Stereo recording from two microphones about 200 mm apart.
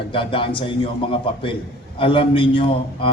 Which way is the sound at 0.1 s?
25° left (ahead or behind).